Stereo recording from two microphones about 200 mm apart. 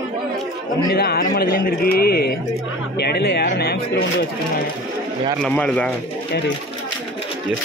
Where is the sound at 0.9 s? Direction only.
50° left (ahead or behind).